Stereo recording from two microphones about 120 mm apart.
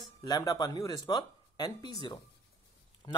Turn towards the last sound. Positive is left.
turn(degrees=35)  # may be behind; listen again after turning